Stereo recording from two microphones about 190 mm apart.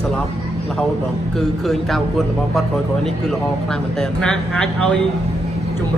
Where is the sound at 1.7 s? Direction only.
Centre (ahead or behind).